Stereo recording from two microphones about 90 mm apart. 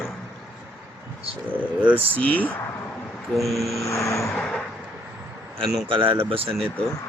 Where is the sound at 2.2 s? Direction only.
15° left (ahead or behind).